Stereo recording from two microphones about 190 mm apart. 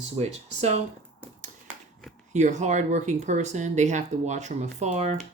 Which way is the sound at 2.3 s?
40° right (ahead or behind).